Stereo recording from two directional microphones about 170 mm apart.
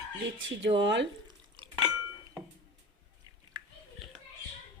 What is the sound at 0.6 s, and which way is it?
Speech, 90° right.